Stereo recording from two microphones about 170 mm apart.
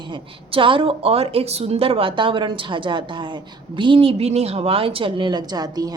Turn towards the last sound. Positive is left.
turn(degrees=-20)  # may be behind; listen again after turning